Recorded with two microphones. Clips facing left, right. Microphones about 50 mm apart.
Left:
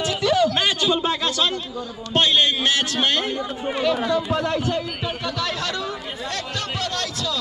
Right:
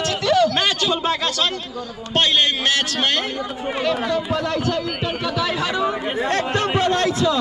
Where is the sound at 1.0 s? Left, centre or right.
Right.